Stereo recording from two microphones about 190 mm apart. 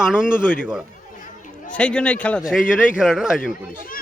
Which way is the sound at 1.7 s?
5° left (ahead or behind).